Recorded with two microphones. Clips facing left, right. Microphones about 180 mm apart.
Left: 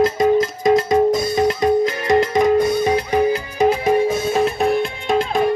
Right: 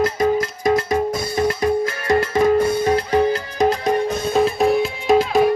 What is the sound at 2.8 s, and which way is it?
Music, 15° left (ahead or behind).